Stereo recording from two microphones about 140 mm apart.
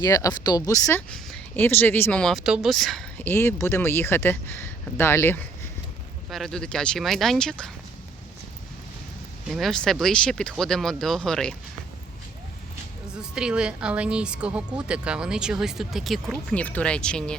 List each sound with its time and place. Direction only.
0.0 s speech: 25° left (ahead or behind)
1.1 s speech: 10° left (ahead or behind)
3.2 s speech: 15° left (ahead or behind)
6.3 s speech: 5° left (ahead or behind)
9.5 s speech: centre (ahead or behind)
13.3 s speech: 5° right (ahead or behind)